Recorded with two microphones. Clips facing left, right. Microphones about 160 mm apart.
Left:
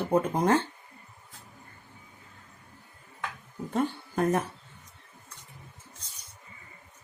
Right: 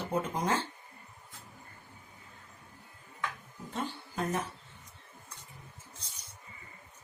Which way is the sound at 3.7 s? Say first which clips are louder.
Left 8 dB; 55° left (ahead or behind).